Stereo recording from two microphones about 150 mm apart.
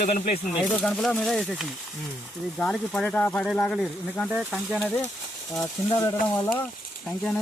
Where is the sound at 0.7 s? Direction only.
5° left (ahead or behind).